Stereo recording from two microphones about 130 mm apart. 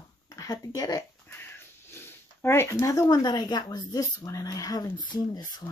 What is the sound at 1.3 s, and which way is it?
Speech, 15° left (ahead or behind).